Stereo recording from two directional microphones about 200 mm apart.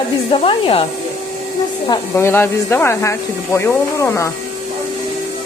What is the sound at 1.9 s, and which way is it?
Speech, 15° left (ahead or behind).